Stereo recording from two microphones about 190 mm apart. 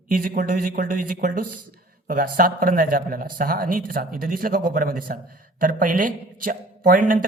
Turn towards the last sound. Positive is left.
turn(degrees=-45)  # may be behind; listen again after turning